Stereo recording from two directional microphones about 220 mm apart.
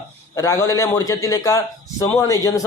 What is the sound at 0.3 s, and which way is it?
Speech, 15° left (ahead or behind).